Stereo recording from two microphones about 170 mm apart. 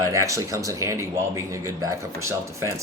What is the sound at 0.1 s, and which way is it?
Speech, 20° right (ahead or behind).